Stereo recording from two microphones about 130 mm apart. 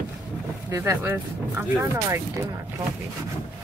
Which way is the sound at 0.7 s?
20° right (ahead or behind).